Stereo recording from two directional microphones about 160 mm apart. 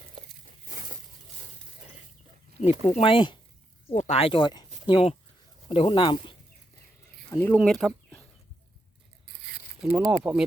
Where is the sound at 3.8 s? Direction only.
45° left (ahead or behind).